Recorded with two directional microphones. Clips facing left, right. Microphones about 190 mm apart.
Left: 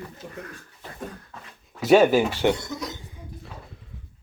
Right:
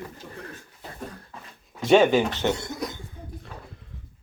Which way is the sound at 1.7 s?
5° left (ahead or behind).